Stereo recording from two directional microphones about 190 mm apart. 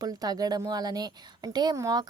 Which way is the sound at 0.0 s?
20° right (ahead or behind).